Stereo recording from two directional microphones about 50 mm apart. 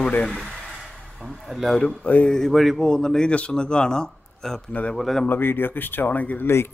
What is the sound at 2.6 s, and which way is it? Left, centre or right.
Speech, centre.